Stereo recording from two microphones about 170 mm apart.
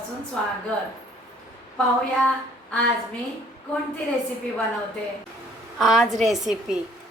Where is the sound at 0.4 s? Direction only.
5° left (ahead or behind).